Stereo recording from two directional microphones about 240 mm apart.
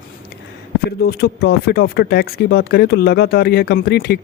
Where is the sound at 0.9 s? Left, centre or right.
Left.